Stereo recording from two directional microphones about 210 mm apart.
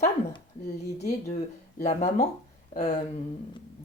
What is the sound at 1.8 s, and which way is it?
Speech, 35° left (ahead or behind).